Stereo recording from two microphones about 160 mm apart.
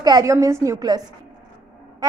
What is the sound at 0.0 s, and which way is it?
A woman's voice, 25° right (ahead or behind).